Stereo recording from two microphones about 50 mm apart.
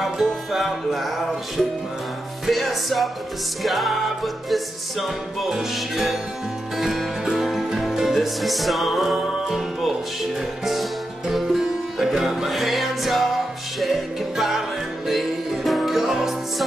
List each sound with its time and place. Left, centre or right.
0.0 s music: centre